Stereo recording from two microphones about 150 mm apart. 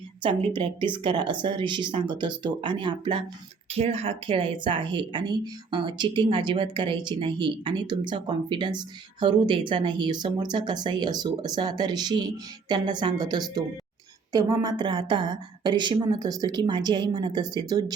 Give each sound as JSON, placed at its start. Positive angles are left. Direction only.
{"t": 0.2, "sound": "a woman's voice", "side_deg": -35}